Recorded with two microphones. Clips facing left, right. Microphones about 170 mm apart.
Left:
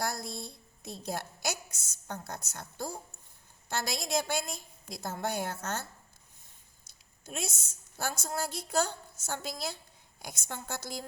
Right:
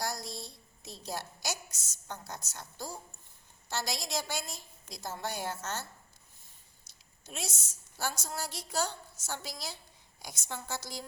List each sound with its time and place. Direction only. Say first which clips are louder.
0.0 s a woman's voice: left 2 dB; 55° left (ahead or behind)
6.8 s a woman's voice: left 4 dB; 55° left (ahead or behind)